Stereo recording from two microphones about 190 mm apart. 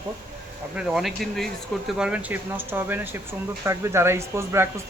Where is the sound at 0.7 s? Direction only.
5° right (ahead or behind).